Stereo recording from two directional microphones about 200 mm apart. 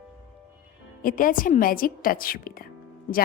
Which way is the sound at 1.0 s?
45° left (ahead or behind).